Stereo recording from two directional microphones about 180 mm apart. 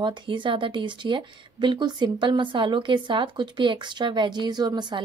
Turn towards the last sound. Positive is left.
turn(degrees=-25)  # may be behind; listen again after turning